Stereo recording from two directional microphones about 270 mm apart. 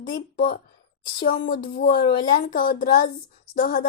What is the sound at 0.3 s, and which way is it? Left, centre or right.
A woman's voice, left.